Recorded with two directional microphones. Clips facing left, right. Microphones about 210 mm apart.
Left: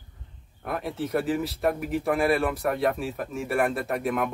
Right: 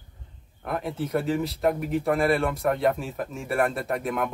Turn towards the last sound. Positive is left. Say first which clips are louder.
# left 1 dB
turn(degrees=0)  # may be behind; listen again after turning